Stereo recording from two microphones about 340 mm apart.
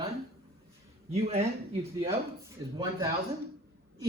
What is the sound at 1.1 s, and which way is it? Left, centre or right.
Speech, centre.